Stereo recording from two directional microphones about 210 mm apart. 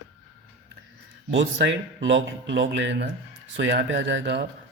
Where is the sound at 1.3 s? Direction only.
55° right (ahead or behind).